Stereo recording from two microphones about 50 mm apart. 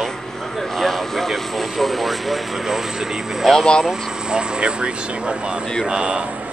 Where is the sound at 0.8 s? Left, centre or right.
Centre.